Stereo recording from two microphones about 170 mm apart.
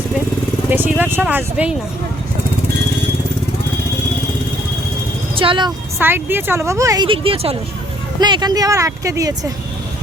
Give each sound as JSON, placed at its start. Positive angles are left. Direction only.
{"t": 0.7, "sound": "speech", "side_deg": -10}
{"t": 5.3, "sound": "speech", "side_deg": -30}
{"t": 6.0, "sound": "speech", "side_deg": -10}